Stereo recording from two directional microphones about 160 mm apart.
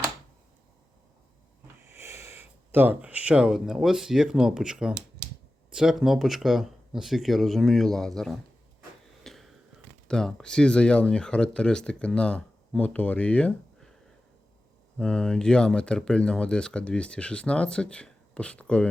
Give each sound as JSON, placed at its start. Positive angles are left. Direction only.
{"t": 1.9, "sound": "speech", "side_deg": -15}
{"t": 9.2, "sound": "a sound", "side_deg": 0}
{"t": 10.1, "sound": "speech", "side_deg": 5}
{"t": 14.9, "sound": "speech", "side_deg": 5}